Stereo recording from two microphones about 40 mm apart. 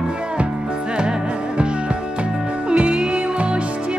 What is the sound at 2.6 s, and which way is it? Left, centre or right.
Music, right.